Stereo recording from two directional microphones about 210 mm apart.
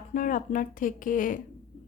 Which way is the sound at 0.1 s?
40° left (ahead or behind).